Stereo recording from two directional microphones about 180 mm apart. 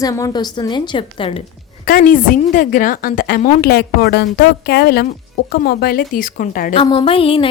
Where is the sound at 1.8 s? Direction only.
50° left (ahead or behind).